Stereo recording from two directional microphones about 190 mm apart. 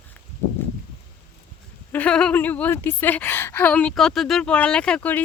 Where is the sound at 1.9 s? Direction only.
5° left (ahead or behind).